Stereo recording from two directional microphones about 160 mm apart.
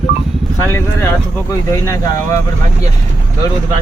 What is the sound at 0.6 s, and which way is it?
Speech, 15° left (ahead or behind).